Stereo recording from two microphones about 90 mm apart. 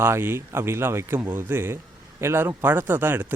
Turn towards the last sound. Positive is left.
turn(degrees=-20)  # may be behind; listen again after turning